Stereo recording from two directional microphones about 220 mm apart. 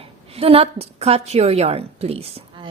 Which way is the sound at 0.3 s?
25° right (ahead or behind).